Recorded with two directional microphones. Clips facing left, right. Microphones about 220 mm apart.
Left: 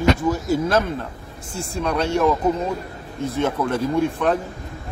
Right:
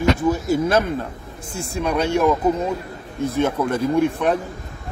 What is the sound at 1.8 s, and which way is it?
Speech, 10° right (ahead or behind).